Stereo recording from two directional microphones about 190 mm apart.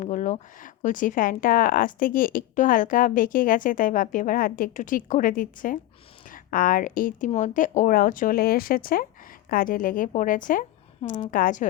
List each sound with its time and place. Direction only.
0.0 s a woman's voice: 40° left (ahead or behind)